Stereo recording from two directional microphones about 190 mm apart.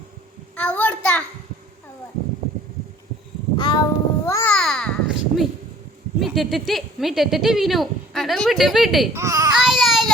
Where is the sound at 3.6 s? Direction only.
25° left (ahead or behind).